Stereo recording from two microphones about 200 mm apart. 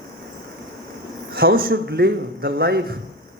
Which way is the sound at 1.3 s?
50° right (ahead or behind).